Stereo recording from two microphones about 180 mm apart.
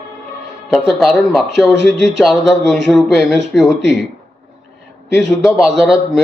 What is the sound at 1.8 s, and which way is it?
Speech, 75° right (ahead or behind).